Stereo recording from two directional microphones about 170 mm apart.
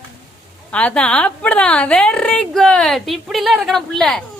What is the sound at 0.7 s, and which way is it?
A woman's voice, 5° left (ahead or behind).